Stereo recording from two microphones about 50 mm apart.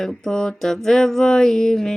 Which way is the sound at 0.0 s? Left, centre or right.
Centre.